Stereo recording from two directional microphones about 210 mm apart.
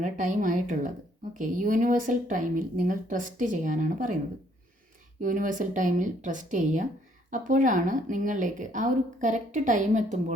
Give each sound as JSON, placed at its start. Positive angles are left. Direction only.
{"t": 0.0, "sound": "a woman's voice", "side_deg": -40}
{"t": 5.2, "sound": "a woman's voice", "side_deg": -40}